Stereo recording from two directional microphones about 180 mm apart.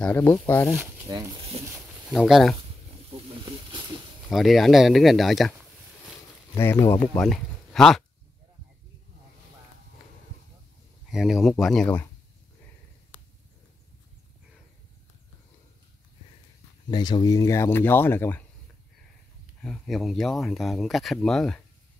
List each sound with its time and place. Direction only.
0.0 s speech: 10° left (ahead or behind)
1.0 s speech: 20° right (ahead or behind)
1.6 s speech: 35° right (ahead or behind)
2.1 s speech: centre (ahead or behind)
4.3 s speech: centre (ahead or behind)
6.5 s speech: 15° left (ahead or behind)
7.2 s speech: centre (ahead or behind)
11.1 s speech: centre (ahead or behind)
16.9 s speech: 25° left (ahead or behind)
19.6 s speech: centre (ahead or behind)